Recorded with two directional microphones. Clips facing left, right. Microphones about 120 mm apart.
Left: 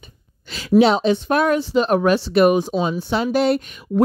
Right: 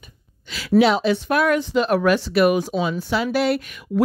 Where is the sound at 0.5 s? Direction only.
25° left (ahead or behind).